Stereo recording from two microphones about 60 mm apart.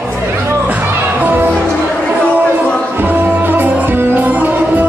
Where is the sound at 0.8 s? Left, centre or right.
Right.